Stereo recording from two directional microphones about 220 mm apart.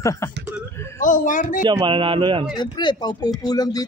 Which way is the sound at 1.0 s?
35° left (ahead or behind).